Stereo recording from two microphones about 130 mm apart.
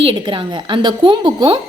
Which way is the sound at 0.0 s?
40° right (ahead or behind).